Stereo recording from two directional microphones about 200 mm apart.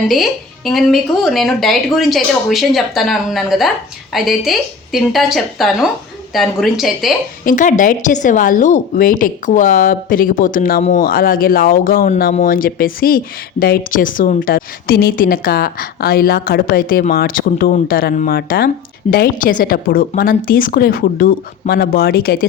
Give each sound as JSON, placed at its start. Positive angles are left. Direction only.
{"t": 0.1, "sound": "speech", "side_deg": 0}
{"t": 7.4, "sound": "speech", "side_deg": 40}